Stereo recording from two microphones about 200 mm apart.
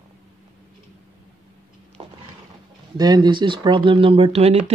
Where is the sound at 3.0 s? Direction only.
20° right (ahead or behind).